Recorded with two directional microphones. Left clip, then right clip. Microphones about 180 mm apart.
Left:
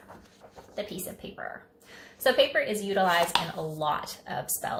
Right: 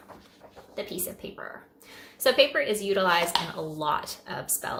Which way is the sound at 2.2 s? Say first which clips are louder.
Right 2 dB; 15° right (ahead or behind).